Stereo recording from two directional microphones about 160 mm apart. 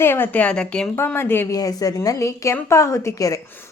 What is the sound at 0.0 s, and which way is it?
A woman's voice, 15° left (ahead or behind).